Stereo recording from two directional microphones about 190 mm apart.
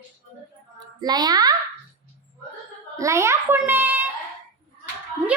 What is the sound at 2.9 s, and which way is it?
A child's voice, 15° right (ahead or behind).